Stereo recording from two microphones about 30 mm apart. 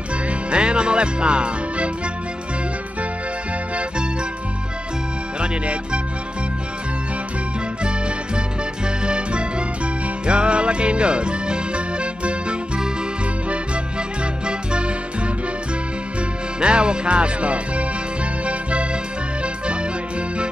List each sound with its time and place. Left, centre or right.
0.3 s music: right
5.4 s music: right
8.4 s music: right
16.5 s music: right